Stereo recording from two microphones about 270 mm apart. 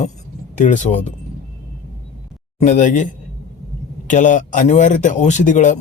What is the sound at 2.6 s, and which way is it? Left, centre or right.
Speech, left.